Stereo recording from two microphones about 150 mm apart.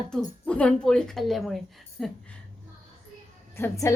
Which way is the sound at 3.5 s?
15° left (ahead or behind).